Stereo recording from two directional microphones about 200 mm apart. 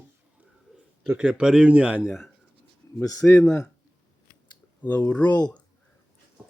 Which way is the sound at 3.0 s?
15° left (ahead or behind).